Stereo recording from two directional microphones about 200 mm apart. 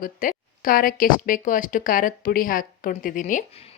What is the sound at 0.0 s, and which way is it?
A woman's voice, 45° left (ahead or behind).